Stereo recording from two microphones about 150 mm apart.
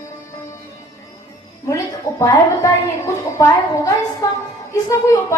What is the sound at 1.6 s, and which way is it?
A woman's voice, 20° left (ahead or behind).